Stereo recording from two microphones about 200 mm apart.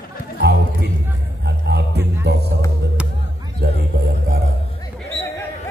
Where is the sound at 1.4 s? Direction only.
55° right (ahead or behind).